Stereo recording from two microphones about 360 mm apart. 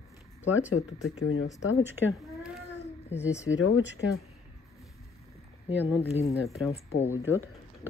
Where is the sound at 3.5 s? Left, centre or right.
Left.